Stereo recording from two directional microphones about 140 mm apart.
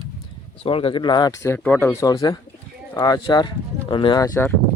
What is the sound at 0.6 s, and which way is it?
Speech, 40° left (ahead or behind).